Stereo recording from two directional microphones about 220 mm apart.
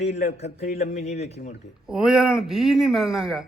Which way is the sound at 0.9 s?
30° left (ahead or behind).